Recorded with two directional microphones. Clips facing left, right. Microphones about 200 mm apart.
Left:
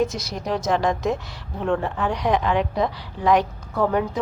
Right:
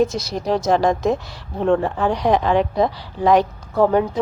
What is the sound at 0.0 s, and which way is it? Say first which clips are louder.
A woman's voice: right 4 dB; 30° right (ahead or behind).